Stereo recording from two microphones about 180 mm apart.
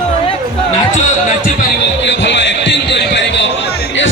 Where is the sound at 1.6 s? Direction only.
85° left.